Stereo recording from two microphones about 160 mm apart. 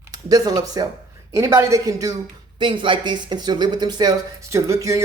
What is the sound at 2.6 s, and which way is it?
Speech, 30° right (ahead or behind).